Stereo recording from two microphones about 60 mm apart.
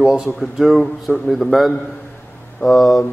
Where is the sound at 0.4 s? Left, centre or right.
Centre.